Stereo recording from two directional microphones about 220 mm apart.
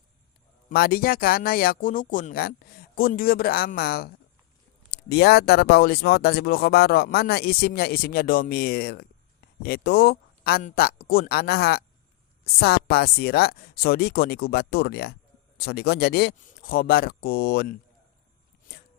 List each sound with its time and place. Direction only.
0.7 s speech: 45° left (ahead or behind)